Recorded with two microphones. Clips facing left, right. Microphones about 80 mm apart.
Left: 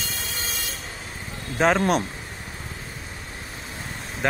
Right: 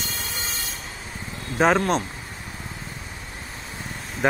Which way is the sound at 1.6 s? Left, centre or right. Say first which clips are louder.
Even; centre.